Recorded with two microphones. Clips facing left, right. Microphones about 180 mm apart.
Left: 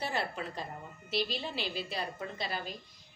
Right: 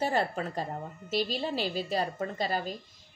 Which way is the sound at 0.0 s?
40° right (ahead or behind).